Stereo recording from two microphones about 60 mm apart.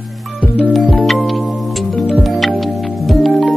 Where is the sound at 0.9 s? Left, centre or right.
Centre.